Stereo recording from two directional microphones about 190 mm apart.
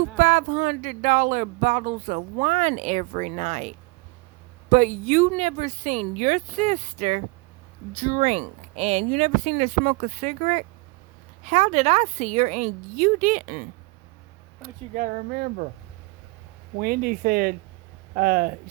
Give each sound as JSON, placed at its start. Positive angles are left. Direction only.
{"t": 0.2, "sound": "speech", "side_deg": -40}
{"t": 14.9, "sound": "speech", "side_deg": -50}
{"t": 16.7, "sound": "speech", "side_deg": -50}